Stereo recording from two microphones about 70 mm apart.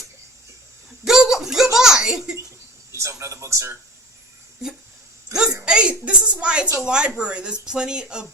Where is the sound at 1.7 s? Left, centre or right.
Centre.